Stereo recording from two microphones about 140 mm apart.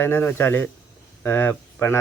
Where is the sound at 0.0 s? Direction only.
15° left (ahead or behind).